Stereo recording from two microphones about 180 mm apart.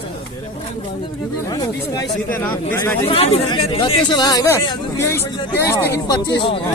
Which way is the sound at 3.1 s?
35° left (ahead or behind).